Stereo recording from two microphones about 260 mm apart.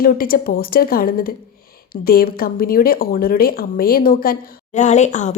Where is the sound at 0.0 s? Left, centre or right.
Left.